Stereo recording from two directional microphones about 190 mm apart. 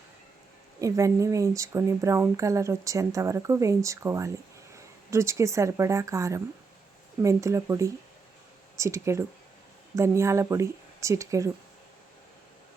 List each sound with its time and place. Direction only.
0.8 s speech: 15° right (ahead or behind)